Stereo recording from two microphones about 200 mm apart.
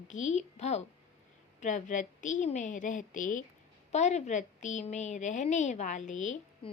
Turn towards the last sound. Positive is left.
turn(degrees=40)  # may be behind; listen again after turning